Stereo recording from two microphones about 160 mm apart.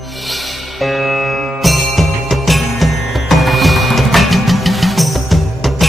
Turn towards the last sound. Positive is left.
turn(degrees=0)  # may be behind; listen again after turning